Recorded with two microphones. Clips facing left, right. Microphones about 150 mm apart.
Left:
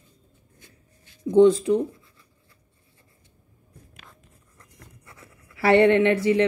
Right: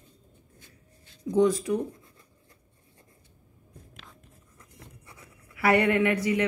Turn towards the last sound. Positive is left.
turn(degrees=30)  # may be behind; listen again after turning